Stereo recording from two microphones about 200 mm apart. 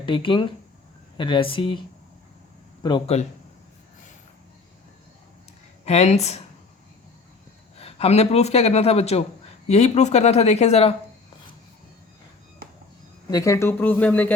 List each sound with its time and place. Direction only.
0.0 s speech: 25° left (ahead or behind)
2.8 s speech: 25° left (ahead or behind)
5.8 s speech: 35° left (ahead or behind)
7.8 s speech: 30° left (ahead or behind)
13.3 s speech: 15° left (ahead or behind)